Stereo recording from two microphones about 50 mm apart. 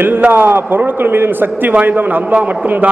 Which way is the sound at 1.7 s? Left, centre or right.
Right.